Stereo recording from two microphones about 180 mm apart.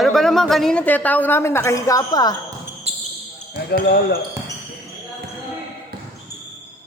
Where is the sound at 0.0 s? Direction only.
Centre (ahead or behind); by 2.3 s 20° left (ahead or behind).